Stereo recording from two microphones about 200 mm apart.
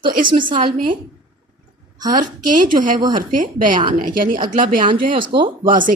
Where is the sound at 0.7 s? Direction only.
45° right (ahead or behind).